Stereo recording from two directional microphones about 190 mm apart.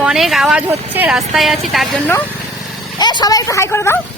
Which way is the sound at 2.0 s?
10° left (ahead or behind).